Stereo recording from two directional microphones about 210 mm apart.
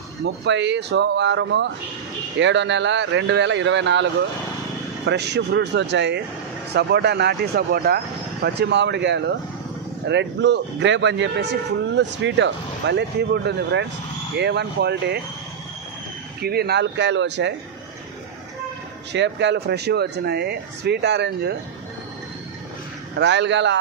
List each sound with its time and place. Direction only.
0.2 s speech: 55° right (ahead or behind)
16.3 s speech: 50° right (ahead or behind)
19.1 s speech: 55° right (ahead or behind)
23.1 s speech: 55° right (ahead or behind)